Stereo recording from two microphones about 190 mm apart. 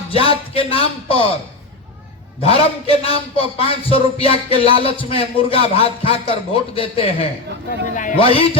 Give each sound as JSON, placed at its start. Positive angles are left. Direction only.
{"t": 0.1, "sound": "a man's voice", "side_deg": 30}
{"t": 2.4, "sound": "a man's voice", "side_deg": 30}
{"t": 7.9, "sound": "a man's voice", "side_deg": 45}
{"t": 8.2, "sound": "a man's voice", "side_deg": 30}